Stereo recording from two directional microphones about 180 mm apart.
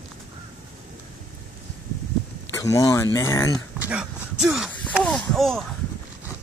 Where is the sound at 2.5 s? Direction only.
15° left (ahead or behind).